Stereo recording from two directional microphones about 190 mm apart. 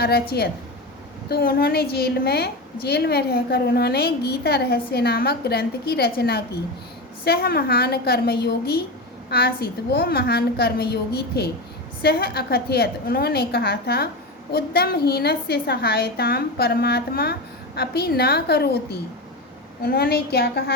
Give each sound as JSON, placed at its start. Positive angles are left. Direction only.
{"t": 0.0, "sound": "a woman's voice", "side_deg": 55}
{"t": 19.8, "sound": "a woman's voice", "side_deg": 55}